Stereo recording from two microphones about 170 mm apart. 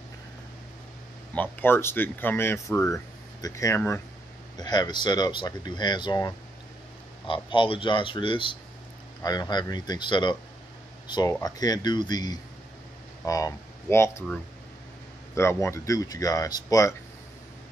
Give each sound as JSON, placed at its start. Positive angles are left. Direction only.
{"t": 1.3, "sound": "speech", "side_deg": 10}
{"t": 11.4, "sound": "speech", "side_deg": 25}
{"t": 15.3, "sound": "speech", "side_deg": 15}